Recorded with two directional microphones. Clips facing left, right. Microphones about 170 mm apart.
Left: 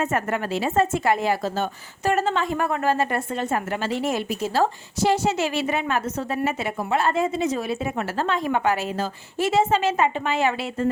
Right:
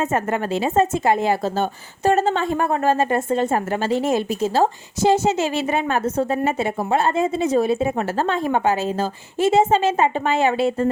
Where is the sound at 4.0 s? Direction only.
25° right (ahead or behind).